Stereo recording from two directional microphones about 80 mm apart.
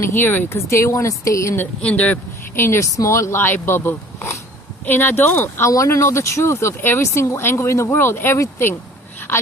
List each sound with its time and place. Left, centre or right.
0.0 s speech: left
1.8 s speech: centre
2.6 s speech: left
5.7 s speech: left